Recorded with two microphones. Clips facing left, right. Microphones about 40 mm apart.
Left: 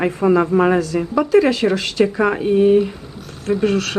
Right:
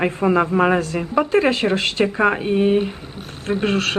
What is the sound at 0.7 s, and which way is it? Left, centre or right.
Speech, right.